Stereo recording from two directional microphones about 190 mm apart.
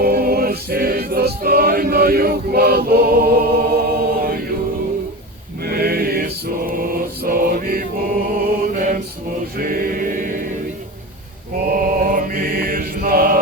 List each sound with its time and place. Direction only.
0.0 s music: 50° right (ahead or behind)
5.6 s a sound: 50° right (ahead or behind)
6.7 s mantra: 50° right (ahead or behind)
9.6 s choir: 50° right (ahead or behind)
11.7 s mantra: 50° right (ahead or behind)